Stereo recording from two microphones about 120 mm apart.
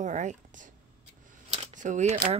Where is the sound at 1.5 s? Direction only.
75° right (ahead or behind).